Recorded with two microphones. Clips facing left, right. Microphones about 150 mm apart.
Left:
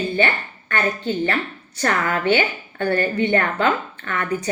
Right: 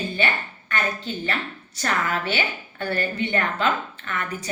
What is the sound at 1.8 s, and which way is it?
A woman's voice, 55° left (ahead or behind).